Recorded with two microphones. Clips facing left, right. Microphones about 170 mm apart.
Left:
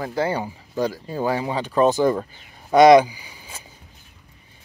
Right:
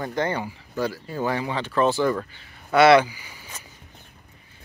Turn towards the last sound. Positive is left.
turn(degrees=15)  # may be behind; listen again after turning